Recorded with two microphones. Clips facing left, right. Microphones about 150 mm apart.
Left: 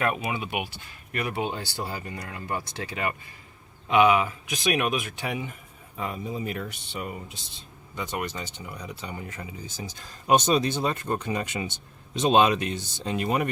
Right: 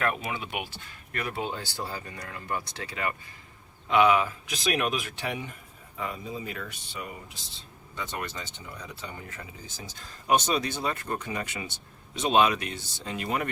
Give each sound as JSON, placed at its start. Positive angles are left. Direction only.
{"t": 0.0, "sound": "speech", "side_deg": 10}
{"t": 3.8, "sound": "speech", "side_deg": 10}
{"t": 6.0, "sound": "speech", "side_deg": 25}
{"t": 7.9, "sound": "speech", "side_deg": 15}